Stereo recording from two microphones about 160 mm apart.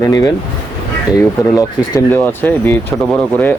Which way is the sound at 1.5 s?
15° left (ahead or behind).